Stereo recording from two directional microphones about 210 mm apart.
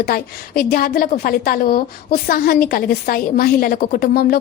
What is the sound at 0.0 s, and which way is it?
A woman's voice, 45° left (ahead or behind).